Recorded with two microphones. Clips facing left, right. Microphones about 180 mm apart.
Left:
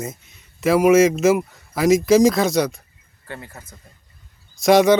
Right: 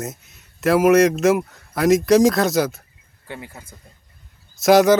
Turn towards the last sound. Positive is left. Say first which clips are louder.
# even
turn(degrees=0)  # may be behind; listen again after turning